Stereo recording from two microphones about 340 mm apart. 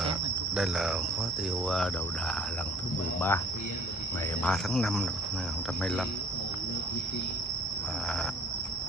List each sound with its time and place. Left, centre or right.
0.5 s speech: centre
3.2 s speech: centre
4.4 s speech: centre